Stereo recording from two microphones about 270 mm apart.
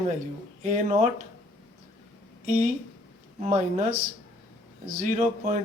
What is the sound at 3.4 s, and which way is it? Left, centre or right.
Speech, right.